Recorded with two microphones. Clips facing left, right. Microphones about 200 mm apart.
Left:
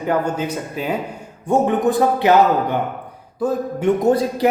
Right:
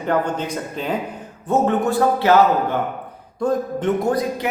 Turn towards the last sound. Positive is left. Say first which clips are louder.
# left 8 dB
turn(degrees=35)  # may be behind; listen again after turning